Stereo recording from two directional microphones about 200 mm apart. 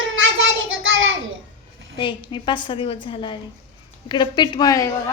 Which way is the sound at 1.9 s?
25° left (ahead or behind).